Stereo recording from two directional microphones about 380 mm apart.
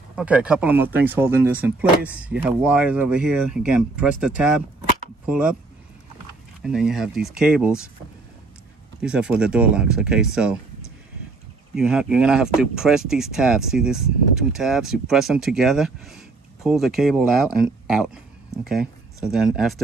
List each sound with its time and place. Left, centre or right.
0.1 s speech: centre
6.6 s speech: centre
9.0 s speech: centre